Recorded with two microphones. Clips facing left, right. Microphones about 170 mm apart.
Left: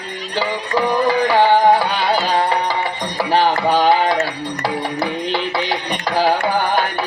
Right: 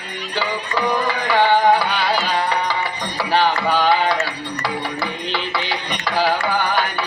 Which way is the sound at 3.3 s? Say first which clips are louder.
Left 2 dB; 45° left (ahead or behind).